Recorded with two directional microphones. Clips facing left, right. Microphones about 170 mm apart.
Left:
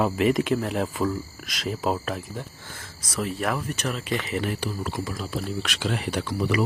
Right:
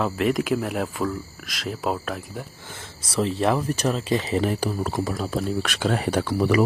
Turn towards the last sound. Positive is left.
turn(degrees=-55)  # may be behind; listen again after turning